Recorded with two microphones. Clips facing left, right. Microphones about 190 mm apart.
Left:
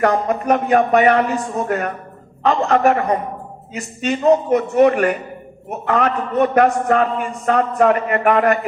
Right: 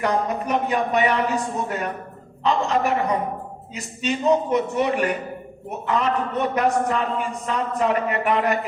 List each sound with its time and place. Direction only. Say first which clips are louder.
0.0 s a man's voice: left 5 dB; 55° left (ahead or behind)